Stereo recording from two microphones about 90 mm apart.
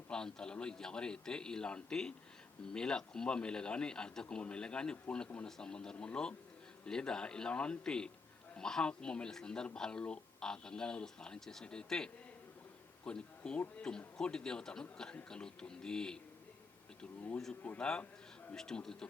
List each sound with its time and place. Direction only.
0.1 s a man's voice: 10° left (ahead or behind)